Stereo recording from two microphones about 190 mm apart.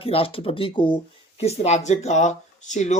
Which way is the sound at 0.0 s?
30° left (ahead or behind).